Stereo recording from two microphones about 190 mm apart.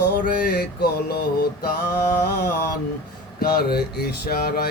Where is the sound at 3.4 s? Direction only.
55° left (ahead or behind).